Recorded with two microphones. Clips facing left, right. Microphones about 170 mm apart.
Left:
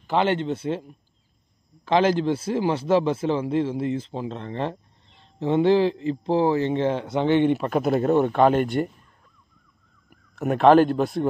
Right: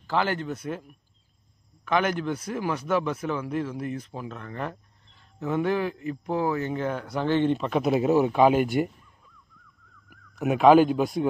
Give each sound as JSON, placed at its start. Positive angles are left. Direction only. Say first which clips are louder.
{"t": 0.0, "sound": "a man's voice", "louder": "left 4 dB", "side_deg": 20}
{"t": 7.8, "sound": "speech", "louder": "left 1 dB", "side_deg": -5}
{"t": 10.0, "sound": "speech", "louder": "left 1 dB", "side_deg": -5}